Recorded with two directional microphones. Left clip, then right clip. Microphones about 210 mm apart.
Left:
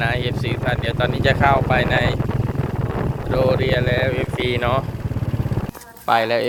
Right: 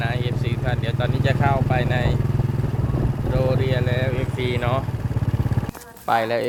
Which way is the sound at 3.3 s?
40° left (ahead or behind).